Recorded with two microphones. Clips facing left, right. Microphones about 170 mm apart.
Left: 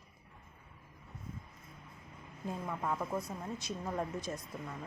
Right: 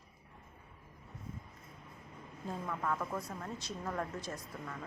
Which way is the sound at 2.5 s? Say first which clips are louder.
Even; 15° left (ahead or behind).